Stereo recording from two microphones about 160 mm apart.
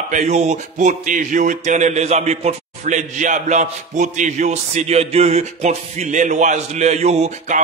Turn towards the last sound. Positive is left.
turn(degrees=-45)  # may be behind; listen again after turning